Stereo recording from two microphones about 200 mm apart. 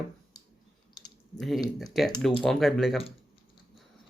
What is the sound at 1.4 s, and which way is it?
Speech, centre (ahead or behind).